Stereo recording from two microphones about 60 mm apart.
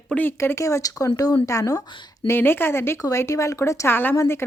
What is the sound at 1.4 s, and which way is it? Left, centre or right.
Speech, left.